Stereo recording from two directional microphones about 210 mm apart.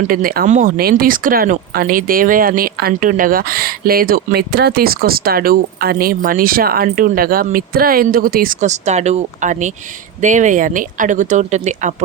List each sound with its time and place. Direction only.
0.1 s speech: 45° right (ahead or behind)